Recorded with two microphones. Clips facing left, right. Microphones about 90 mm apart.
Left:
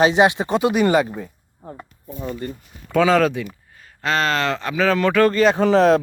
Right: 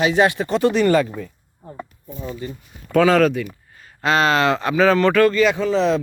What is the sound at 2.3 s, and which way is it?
Speech, 55° left (ahead or behind).